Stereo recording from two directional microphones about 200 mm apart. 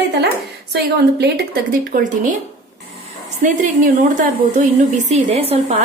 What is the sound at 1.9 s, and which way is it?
Speech, 40° right (ahead or behind).